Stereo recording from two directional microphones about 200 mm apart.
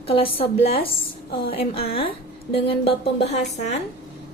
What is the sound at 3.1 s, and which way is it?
Speech, 35° left (ahead or behind).